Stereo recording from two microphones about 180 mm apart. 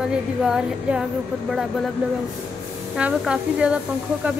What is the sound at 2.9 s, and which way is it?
Speech, 5° right (ahead or behind).